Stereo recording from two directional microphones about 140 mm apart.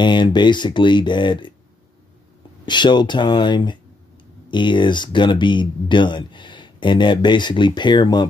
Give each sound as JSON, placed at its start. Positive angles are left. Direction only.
{"t": 0.0, "sound": "speech", "side_deg": 35}
{"t": 2.6, "sound": "speech", "side_deg": 30}